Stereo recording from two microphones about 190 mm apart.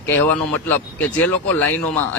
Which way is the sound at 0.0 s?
10° left (ahead or behind).